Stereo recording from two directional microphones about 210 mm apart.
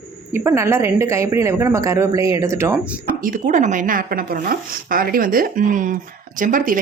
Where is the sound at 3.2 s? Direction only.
40° right (ahead or behind).